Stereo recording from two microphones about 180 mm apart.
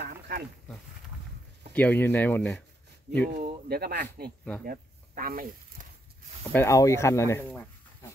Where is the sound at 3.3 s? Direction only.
60° right (ahead or behind).